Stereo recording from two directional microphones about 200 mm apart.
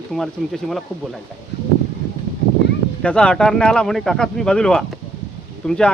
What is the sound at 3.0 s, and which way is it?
Speech, 5° left (ahead or behind).